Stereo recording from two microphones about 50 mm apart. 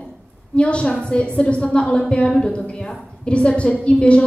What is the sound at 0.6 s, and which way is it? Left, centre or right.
A woman's voice, left.